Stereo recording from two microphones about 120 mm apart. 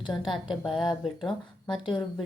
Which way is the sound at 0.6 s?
Centre (ahead or behind).